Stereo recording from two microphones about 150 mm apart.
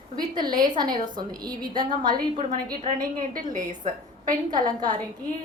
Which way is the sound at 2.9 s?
70° right (ahead or behind).